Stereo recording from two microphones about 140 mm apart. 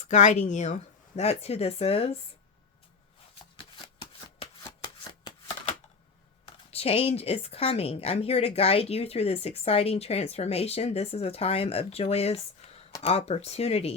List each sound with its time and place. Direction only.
0.0 s a woman's voice: 60° left (ahead or behind)
6.7 s a woman's voice: 45° left (ahead or behind)